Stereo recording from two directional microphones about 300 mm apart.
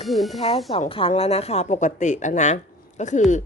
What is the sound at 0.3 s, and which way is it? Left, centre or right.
A woman's voice, centre.